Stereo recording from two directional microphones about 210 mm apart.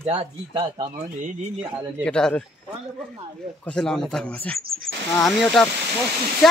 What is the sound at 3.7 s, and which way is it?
Speech, 5° left (ahead or behind).